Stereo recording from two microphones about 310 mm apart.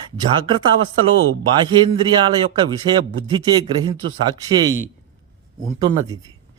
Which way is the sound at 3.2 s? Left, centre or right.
Centre.